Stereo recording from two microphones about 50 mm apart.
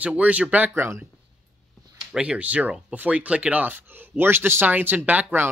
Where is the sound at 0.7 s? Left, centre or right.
Right.